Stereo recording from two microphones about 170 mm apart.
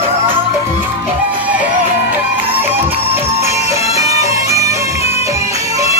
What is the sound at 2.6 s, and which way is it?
Music, 15° right (ahead or behind).